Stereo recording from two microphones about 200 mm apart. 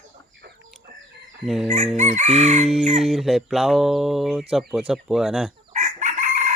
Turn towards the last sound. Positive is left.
turn(degrees=-35)  # may be behind; listen again after turning